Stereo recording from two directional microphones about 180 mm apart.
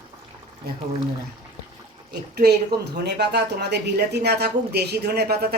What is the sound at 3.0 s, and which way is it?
Speech, 65° right (ahead or behind).